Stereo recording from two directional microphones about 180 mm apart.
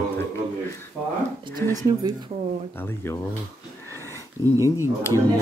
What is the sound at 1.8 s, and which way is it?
Speech, 20° right (ahead or behind).